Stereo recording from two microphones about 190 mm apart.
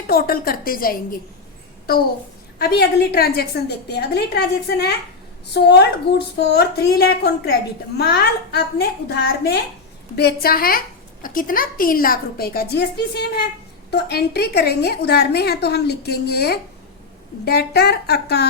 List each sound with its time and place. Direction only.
0.1 s a woman's voice: 50° left (ahead or behind)
2.6 s a woman's voice: 55° left (ahead or behind)